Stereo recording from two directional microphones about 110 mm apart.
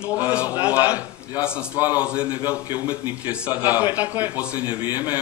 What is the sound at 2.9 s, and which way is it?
A man's voice, 15° right (ahead or behind).